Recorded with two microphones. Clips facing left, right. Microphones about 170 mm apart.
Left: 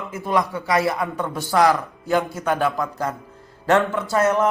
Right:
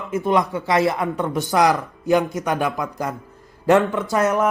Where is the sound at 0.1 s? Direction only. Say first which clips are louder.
Right 3 dB; 20° right (ahead or behind).